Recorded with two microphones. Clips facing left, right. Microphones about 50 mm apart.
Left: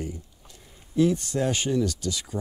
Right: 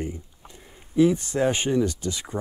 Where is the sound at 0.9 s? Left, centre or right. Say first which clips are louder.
Right 3 dB; centre.